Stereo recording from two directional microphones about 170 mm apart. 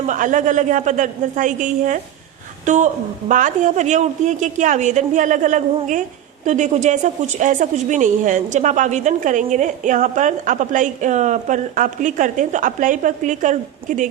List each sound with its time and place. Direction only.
0.0 s a woman's voice: 45° right (ahead or behind)